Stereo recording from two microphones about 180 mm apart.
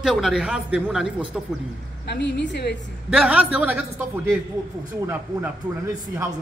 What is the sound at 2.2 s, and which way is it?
Speech, 75° left (ahead or behind).